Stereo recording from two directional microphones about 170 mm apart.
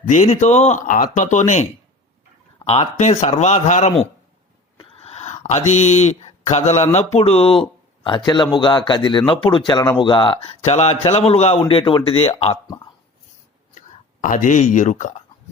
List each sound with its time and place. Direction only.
0.0 s speech: 45° left (ahead or behind)
2.6 s speech: 40° left (ahead or behind)
4.8 s a sound: 40° left (ahead or behind)
6.5 s a man's voice: 40° left (ahead or behind)
12.6 s speech: 25° left (ahead or behind)
13.7 s speech: 50° left (ahead or behind)